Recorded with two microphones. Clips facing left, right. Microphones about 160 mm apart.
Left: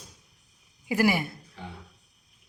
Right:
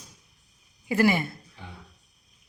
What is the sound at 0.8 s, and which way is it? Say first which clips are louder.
Speech: right 2 dB; 10° left (ahead or behind).